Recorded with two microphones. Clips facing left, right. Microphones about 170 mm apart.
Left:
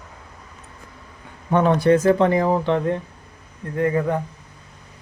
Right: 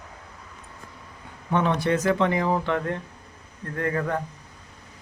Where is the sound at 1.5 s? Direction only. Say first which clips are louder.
Left 7 dB; 45° left (ahead or behind); by 4.2 s 15° left (ahead or behind).